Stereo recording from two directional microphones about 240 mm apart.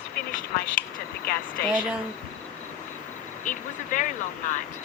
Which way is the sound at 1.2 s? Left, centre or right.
Left.